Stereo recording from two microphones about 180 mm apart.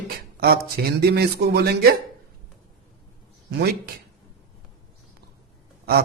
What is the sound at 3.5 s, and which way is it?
Speech, 60° right (ahead or behind).